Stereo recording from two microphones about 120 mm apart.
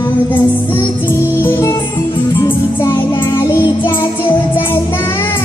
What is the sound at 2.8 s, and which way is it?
Child singing, 20° left (ahead or behind).